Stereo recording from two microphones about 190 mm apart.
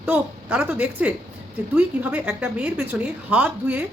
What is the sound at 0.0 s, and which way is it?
Speech, 10° right (ahead or behind).